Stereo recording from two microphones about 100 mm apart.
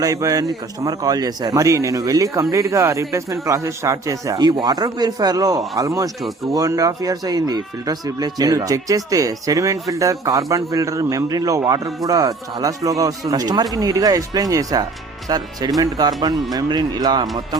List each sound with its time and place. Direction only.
0.0 s speech: 35° right (ahead or behind)